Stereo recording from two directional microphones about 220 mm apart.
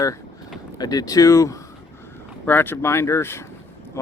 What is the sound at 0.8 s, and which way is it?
Speech, 15° left (ahead or behind).